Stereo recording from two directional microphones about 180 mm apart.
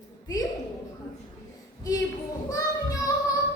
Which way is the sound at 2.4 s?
20° left (ahead or behind).